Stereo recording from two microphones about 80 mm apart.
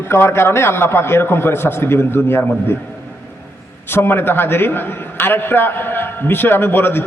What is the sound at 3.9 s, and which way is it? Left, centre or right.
A man's voice, left.